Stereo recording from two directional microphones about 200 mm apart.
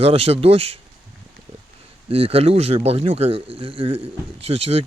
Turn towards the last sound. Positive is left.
turn(degrees=-30)  # may be behind; listen again after turning